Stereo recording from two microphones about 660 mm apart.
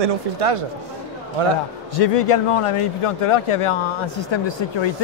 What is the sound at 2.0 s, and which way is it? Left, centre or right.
Speech, left.